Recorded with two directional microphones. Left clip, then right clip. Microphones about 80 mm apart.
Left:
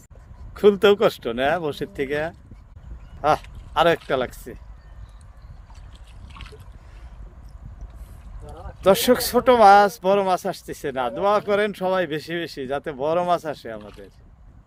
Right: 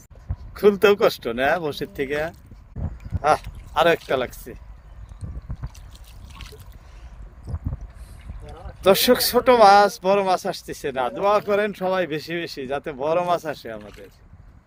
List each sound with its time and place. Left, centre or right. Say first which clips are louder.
0.5 s speech: even; left; by 4.6 s centre
8.8 s speech: right 1 dB; centre